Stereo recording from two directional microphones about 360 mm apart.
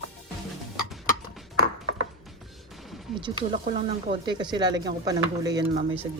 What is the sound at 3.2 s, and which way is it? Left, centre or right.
Speech, centre.